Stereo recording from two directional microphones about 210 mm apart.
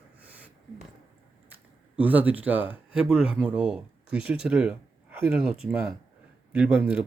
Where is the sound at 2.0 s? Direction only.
5° right (ahead or behind).